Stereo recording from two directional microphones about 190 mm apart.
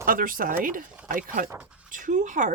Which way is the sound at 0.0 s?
45° right (ahead or behind).